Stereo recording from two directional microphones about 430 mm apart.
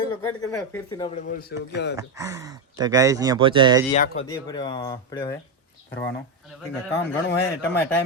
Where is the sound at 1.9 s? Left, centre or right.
Centre.